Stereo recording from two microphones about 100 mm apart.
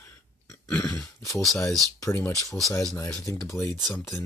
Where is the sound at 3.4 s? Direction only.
25° left (ahead or behind).